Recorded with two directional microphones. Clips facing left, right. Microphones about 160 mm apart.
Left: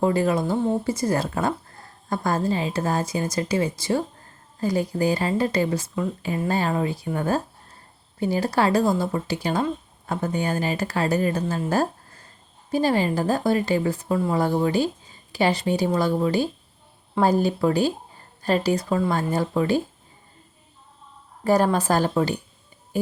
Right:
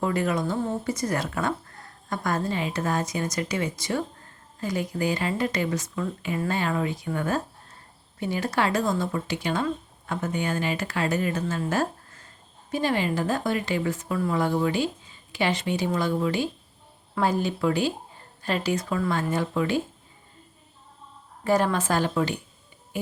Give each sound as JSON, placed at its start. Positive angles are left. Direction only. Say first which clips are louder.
{"t": 0.0, "sound": "a woman's voice", "louder": "left 4 dB", "side_deg": 30}
{"t": 11.7, "sound": "a sound", "louder": "left 3 dB", "side_deg": 35}
{"t": 12.7, "sound": "a woman's voice", "louder": "left 4 dB", "side_deg": 35}
{"t": 21.4, "sound": "a woman's voice", "louder": "left 3 dB", "side_deg": 40}